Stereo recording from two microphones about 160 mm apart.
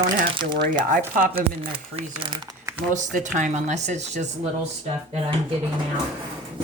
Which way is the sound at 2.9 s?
50° right (ahead or behind).